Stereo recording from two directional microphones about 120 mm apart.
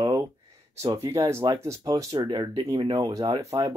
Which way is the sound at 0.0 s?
35° right (ahead or behind).